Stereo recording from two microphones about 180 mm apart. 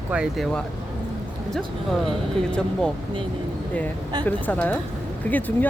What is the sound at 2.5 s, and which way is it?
Speech, 5° left (ahead or behind).